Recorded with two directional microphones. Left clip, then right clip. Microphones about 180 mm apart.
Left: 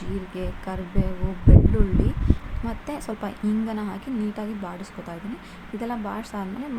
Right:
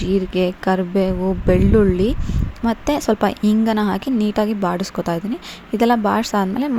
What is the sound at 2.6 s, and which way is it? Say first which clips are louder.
A woman's voice: right 14 dB; 45° right (ahead or behind).